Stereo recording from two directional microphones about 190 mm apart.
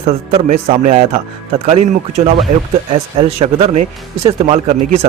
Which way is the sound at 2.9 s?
30° right (ahead or behind).